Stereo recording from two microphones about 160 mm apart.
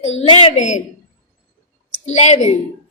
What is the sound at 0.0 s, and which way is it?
Speech, 40° left (ahead or behind).